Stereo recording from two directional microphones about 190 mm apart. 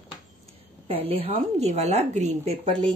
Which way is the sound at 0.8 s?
30° right (ahead or behind).